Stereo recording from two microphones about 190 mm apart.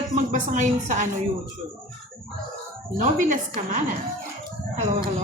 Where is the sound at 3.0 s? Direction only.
40° right (ahead or behind).